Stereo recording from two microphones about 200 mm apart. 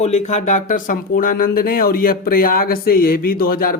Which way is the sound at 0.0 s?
35° left (ahead or behind).